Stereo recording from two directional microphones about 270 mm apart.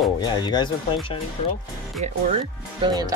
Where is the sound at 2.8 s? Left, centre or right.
Centre.